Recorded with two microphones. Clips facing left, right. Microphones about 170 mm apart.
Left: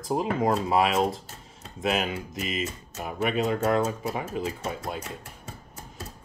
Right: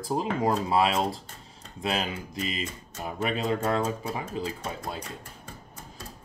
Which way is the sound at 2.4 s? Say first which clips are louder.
Even; 30° right (ahead or behind).